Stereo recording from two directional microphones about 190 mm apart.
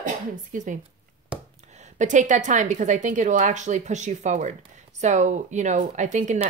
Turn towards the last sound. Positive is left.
turn(degrees=-40)  # may be behind; listen again after turning